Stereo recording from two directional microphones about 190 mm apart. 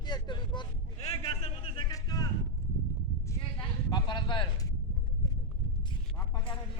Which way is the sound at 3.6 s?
25° left (ahead or behind).